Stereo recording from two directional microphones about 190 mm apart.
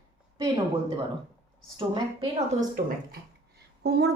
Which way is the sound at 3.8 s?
60° right (ahead or behind).